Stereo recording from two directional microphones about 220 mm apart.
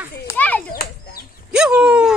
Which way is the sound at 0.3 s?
5° left (ahead or behind).